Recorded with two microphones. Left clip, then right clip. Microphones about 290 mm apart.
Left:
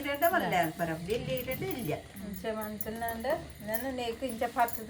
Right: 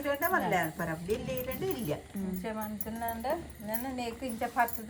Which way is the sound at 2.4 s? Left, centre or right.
Centre.